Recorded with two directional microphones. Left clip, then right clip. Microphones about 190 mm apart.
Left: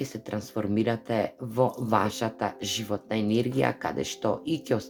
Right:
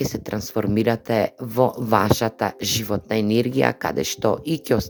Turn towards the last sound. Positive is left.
turn(degrees=-40)  # may be behind; listen again after turning